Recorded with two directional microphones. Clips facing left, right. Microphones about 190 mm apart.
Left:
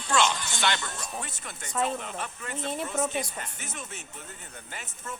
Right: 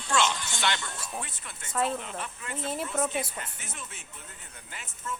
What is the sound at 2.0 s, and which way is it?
Speech, 45° left (ahead or behind).